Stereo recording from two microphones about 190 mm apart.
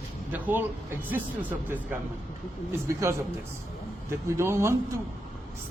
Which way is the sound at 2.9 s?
15° right (ahead or behind).